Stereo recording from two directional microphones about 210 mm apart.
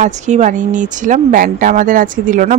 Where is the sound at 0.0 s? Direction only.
35° right (ahead or behind).